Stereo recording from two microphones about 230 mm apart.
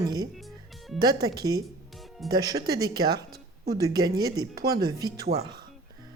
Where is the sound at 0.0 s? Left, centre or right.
Centre.